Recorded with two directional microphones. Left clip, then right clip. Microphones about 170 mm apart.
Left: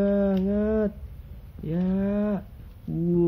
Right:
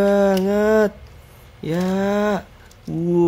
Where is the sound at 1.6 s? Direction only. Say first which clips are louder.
Right 8 dB; 35° right (ahead or behind).